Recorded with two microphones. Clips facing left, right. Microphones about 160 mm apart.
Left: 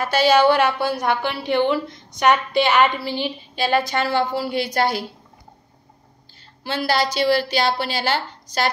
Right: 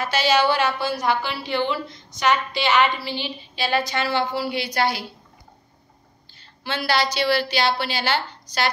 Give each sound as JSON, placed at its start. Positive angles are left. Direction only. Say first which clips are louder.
{"t": 0.0, "sound": "a woman's voice", "louder": "left 4 dB", "side_deg": 55}
{"t": 6.6, "sound": "a woman's voice", "louder": "left 2 dB", "side_deg": 45}